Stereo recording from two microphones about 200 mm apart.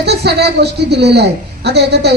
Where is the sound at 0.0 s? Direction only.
55° right (ahead or behind).